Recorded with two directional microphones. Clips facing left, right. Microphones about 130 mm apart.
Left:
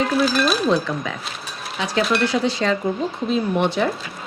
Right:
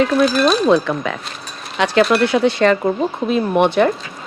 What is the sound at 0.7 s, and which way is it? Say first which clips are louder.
Speech: right 5 dB; 60° right (ahead or behind).